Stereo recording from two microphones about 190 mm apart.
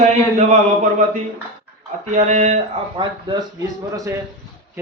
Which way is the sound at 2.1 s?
40° right (ahead or behind).